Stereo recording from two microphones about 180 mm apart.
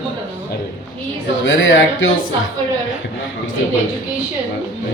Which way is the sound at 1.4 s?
90° left.